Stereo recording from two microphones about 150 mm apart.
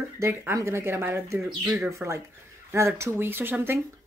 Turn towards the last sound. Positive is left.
turn(degrees=-15)  # may be behind; listen again after turning